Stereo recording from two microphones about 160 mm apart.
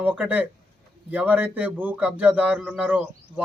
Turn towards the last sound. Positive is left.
turn(degrees=-10)  # may be behind; listen again after turning